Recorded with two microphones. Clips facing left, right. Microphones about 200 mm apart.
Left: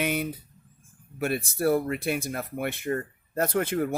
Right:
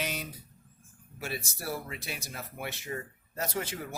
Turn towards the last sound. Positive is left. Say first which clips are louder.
# left 10 dB
turn(degrees=55)  # may be behind; listen again after turning